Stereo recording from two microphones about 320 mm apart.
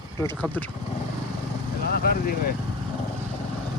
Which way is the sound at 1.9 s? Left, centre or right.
Left.